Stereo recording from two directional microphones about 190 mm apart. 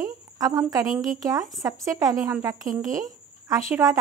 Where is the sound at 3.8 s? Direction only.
15° right (ahead or behind).